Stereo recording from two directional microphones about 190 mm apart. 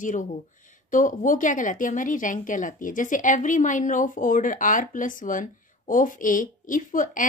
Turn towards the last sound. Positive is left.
turn(degrees=45)  # may be behind; listen again after turning